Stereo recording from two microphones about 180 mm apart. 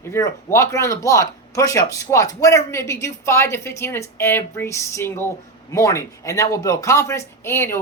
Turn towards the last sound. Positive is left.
turn(degrees=15)  # may be behind; listen again after turning